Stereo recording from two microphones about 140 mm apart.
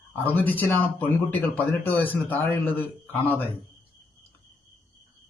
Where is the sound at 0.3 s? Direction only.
15° left (ahead or behind).